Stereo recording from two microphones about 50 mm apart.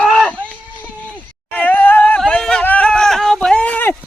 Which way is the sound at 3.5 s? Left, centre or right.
Left.